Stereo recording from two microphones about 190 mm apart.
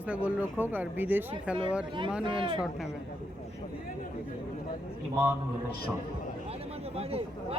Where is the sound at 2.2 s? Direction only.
25° right (ahead or behind).